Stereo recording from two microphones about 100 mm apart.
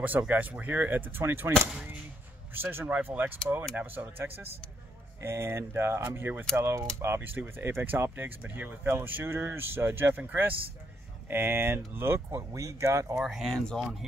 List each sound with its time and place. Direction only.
0.3 s speech: 15° right (ahead or behind)
2.5 s speech: 20° right (ahead or behind)
13.2 s speech: centre (ahead or behind)